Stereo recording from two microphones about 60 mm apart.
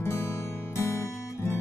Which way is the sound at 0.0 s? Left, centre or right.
Left.